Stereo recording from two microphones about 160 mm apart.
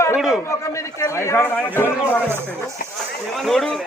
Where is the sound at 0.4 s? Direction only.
20° left (ahead or behind).